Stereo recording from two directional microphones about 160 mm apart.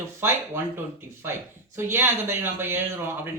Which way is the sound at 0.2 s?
15° right (ahead or behind).